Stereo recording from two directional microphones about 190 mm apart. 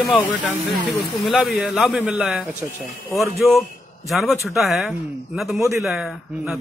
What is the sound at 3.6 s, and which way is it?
Speech, centre (ahead or behind).